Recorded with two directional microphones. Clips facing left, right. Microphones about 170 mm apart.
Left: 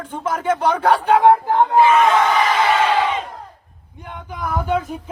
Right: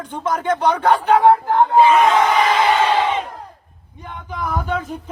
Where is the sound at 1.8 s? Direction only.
20° right (ahead or behind).